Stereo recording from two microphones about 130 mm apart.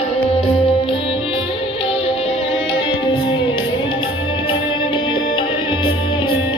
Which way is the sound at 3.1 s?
40° left (ahead or behind).